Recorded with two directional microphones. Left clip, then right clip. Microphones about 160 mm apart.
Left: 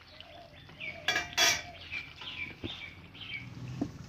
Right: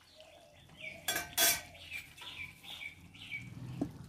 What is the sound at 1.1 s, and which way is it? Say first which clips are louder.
Cutlery: left 5 dB; centre (ahead or behind).